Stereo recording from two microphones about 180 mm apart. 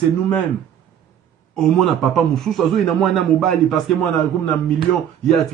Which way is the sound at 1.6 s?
Centre (ahead or behind).